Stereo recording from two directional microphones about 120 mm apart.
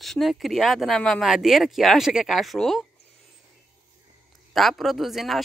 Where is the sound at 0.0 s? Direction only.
Centre (ahead or behind).